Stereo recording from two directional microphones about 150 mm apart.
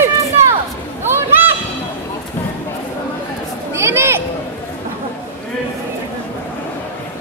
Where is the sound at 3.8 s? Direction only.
15° right (ahead or behind).